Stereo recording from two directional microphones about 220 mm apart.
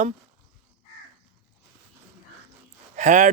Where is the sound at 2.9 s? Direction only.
35° right (ahead or behind).